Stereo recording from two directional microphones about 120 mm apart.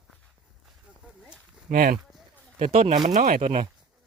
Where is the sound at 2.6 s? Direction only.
55° right (ahead or behind).